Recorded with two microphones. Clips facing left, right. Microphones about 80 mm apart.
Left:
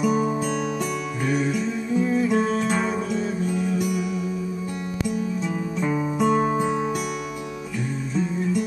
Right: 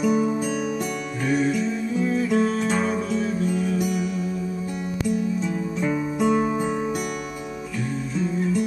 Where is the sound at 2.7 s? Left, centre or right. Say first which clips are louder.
Right 1 dB; centre.